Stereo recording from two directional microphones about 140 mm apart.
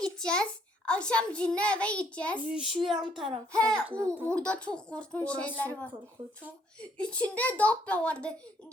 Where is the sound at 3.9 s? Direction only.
20° right (ahead or behind).